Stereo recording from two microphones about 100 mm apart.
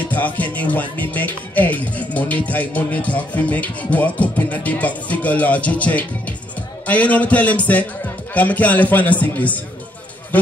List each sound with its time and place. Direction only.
0.1 s speech: 15° left (ahead or behind)